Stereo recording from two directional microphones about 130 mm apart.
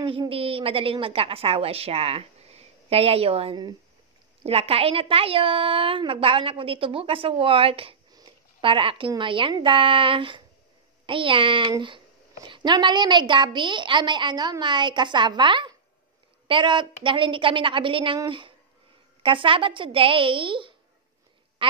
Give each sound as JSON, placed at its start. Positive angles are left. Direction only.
{"t": 0.0, "sound": "a woman's voice", "side_deg": -45}
{"t": 8.1, "sound": "a sound", "side_deg": -30}
{"t": 8.6, "sound": "a woman's voice", "side_deg": -40}